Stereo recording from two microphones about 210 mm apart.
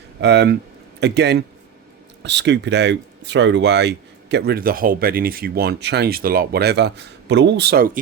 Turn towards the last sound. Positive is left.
turn(degrees=-50)  # may be behind; listen again after turning